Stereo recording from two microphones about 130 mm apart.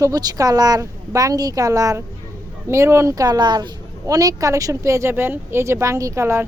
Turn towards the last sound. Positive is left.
turn(degrees=-20)  # may be behind; listen again after turning